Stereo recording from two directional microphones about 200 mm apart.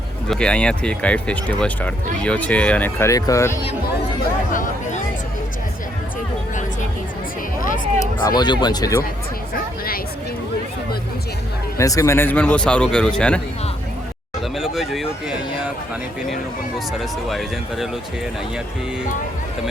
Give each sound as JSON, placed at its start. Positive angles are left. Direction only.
{"t": 0.3, "sound": "speech", "side_deg": 5}
{"t": 4.5, "sound": "speech", "side_deg": 40}
{"t": 8.3, "sound": "speech", "side_deg": 20}
{"t": 11.8, "sound": "speech", "side_deg": 15}
{"t": 14.5, "sound": "speech", "side_deg": 0}
{"t": 17.0, "sound": "speech", "side_deg": 0}